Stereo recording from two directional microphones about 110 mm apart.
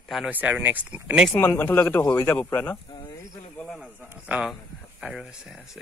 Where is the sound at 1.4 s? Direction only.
20° left (ahead or behind).